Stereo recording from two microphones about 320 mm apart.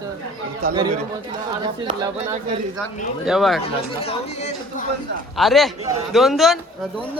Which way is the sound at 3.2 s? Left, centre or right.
Centre.